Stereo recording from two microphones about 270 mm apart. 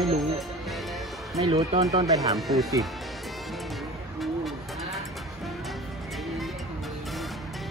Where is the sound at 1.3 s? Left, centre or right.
Right.